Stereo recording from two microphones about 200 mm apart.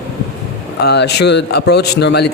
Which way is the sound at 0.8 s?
55° left (ahead or behind).